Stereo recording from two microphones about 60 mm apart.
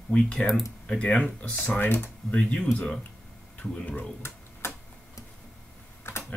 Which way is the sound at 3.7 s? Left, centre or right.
Left.